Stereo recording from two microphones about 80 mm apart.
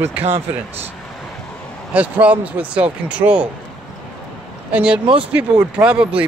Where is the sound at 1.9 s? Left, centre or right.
Centre.